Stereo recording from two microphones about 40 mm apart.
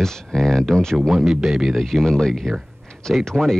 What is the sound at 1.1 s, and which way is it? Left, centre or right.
Speech, centre.